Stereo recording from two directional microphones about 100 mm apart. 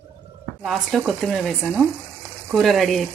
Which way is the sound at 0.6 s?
Centre (ahead or behind).